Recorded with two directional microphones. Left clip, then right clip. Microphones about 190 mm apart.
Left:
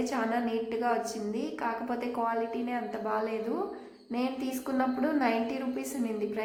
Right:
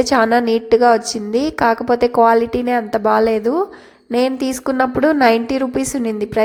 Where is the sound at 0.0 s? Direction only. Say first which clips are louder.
Right 17 dB; 50° right (ahead or behind).